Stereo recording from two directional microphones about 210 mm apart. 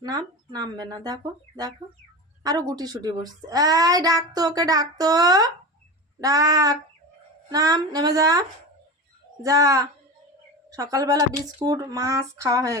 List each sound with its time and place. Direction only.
0.0 s a child's voice: 20° right (ahead or behind)